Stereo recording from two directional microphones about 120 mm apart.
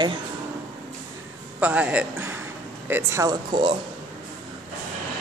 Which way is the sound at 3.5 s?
40° right (ahead or behind).